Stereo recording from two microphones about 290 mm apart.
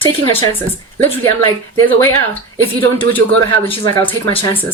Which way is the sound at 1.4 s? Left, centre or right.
Centre.